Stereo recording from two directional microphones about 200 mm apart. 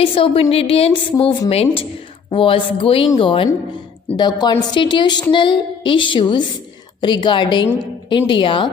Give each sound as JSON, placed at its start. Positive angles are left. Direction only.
{"t": 0.0, "sound": "a child's voice", "side_deg": 25}